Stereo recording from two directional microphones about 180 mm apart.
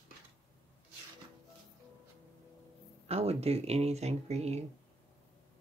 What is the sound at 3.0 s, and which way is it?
Speech, 35° right (ahead or behind).